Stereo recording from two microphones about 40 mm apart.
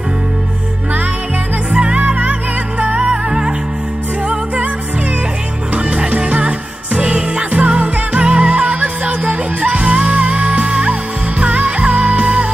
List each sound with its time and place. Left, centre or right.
1.7 s music: right
3.1 s music: right
5.8 s music: right